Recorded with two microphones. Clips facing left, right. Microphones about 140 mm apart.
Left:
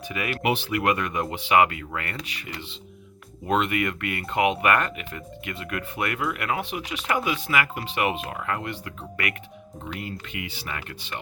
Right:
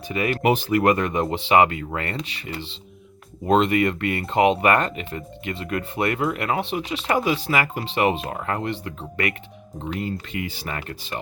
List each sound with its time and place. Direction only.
0.1 s speech: 30° right (ahead or behind)